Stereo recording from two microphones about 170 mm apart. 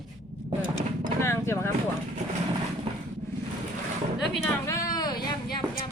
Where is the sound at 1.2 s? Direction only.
15° left (ahead or behind).